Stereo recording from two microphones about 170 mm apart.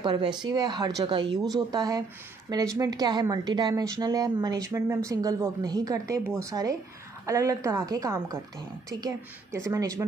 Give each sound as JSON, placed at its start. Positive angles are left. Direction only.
{"t": 0.5, "sound": "speech", "side_deg": -25}